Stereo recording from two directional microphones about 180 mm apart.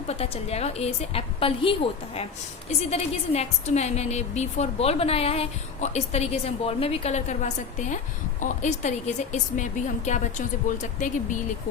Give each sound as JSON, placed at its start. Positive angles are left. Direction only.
{"t": 0.1, "sound": "a woman's voice", "side_deg": 35}